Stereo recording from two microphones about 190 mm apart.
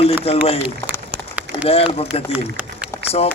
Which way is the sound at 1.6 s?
30° left (ahead or behind).